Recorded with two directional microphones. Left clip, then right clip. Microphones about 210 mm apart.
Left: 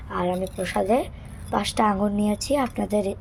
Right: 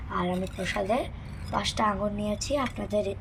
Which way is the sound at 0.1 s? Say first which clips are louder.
Left 5 dB; 55° left (ahead or behind).